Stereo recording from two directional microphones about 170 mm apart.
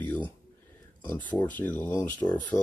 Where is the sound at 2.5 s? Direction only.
25° left (ahead or behind).